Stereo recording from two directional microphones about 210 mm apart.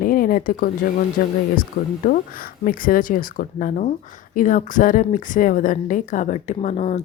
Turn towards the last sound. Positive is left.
turn(degrees=30)  # may be behind; listen again after turning